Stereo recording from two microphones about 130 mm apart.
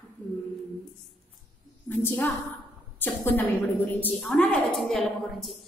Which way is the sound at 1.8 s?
15° left (ahead or behind).